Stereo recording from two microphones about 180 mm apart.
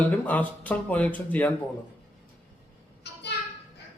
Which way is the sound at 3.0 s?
70° left (ahead or behind).